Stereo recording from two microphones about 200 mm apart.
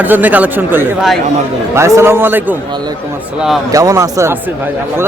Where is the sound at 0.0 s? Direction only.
10° right (ahead or behind).